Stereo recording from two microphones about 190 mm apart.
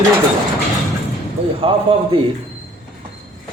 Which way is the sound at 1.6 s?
30° right (ahead or behind).